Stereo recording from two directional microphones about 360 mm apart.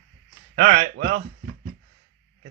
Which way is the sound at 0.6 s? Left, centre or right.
Centre.